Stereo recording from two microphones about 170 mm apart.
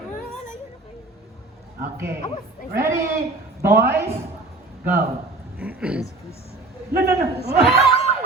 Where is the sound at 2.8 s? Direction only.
15° right (ahead or behind).